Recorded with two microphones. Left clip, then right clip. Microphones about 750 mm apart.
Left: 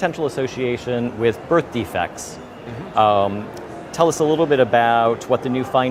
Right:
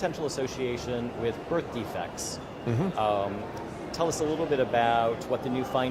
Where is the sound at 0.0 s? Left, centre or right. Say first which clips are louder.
Left 9 dB; left.